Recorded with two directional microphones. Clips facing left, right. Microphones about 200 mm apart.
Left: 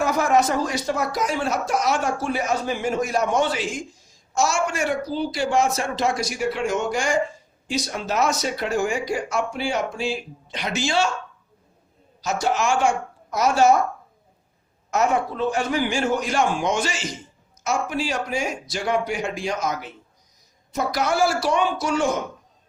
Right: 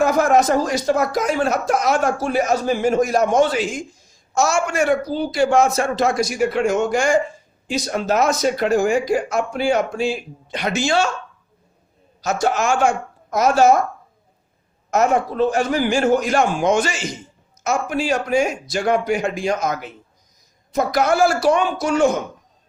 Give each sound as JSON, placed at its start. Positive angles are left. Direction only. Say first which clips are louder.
{"t": 0.0, "sound": "speech", "louder": "right 4 dB", "side_deg": -50}
{"t": 4.4, "sound": "speech", "louder": "right 4 dB", "side_deg": -55}
{"t": 12.2, "sound": "speech", "louder": "right 3 dB", "side_deg": -45}
{"t": 14.8, "sound": "speech", "louder": "right 4 dB", "side_deg": -45}